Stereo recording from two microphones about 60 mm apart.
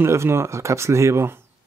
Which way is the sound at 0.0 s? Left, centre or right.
Right.